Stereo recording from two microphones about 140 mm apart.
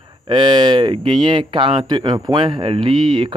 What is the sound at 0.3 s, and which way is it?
Speech, 30° right (ahead or behind).